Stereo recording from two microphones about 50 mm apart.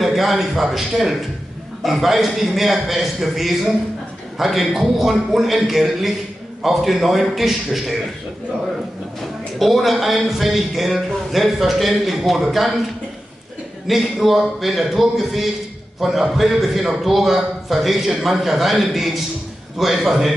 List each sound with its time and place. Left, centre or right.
0.0 s a man's voice: centre
9.6 s a man's voice: centre
13.8 s a man's voice: centre